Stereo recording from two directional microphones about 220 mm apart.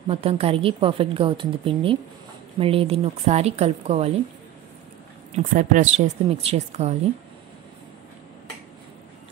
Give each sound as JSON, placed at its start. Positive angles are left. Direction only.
{"t": 0.1, "sound": "a woman's voice", "side_deg": -25}
{"t": 5.3, "sound": "a woman's voice", "side_deg": -35}